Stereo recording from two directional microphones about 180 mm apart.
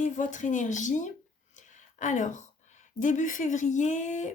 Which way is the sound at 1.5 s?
45° left (ahead or behind).